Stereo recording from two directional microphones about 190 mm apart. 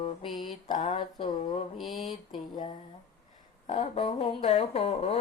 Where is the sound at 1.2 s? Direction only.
40° left (ahead or behind).